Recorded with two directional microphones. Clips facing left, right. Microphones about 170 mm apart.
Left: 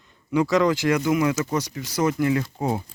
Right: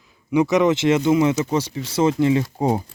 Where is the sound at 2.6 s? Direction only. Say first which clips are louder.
Right 5 dB; 35° right (ahead or behind).